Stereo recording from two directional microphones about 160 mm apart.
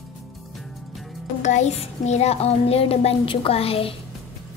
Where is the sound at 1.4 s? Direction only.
50° left (ahead or behind).